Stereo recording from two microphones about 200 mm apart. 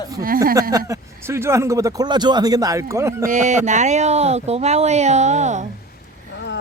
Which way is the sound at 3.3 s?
35° right (ahead or behind).